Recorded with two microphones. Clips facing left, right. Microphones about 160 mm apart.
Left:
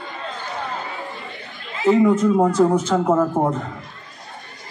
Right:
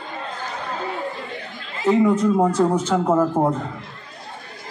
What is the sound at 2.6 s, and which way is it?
Speech, 10° left (ahead or behind).